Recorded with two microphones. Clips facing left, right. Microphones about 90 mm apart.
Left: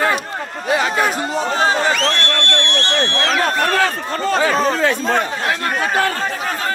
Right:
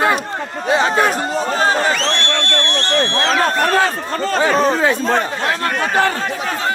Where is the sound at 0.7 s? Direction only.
30° right (ahead or behind).